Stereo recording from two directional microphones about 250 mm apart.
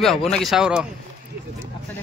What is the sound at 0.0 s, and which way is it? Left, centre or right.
Speech, centre.